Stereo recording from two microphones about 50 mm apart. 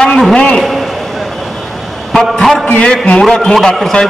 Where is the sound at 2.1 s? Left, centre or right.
Centre.